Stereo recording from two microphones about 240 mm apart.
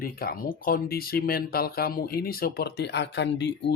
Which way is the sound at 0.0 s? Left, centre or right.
Left.